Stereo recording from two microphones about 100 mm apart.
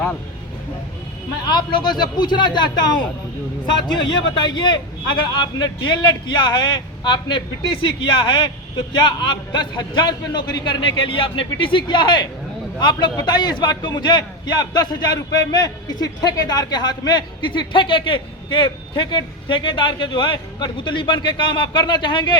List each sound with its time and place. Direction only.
1.5 s a man's voice: 50° left (ahead or behind)
4.4 s a man's voice: 50° left (ahead or behind)